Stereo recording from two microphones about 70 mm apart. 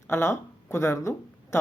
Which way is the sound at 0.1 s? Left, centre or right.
Left.